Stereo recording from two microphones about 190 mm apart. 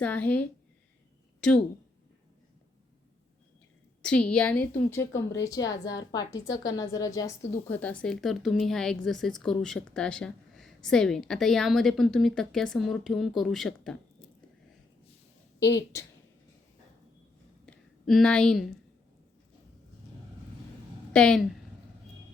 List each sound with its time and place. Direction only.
0.0 s a woman's voice: 5° left (ahead or behind)
4.0 s a woman's voice: 5° left (ahead or behind)
17.7 s a sound: centre (ahead or behind)
21.1 s a woman's voice: 5° left (ahead or behind)